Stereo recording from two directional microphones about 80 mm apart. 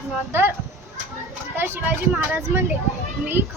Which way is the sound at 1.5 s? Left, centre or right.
Right.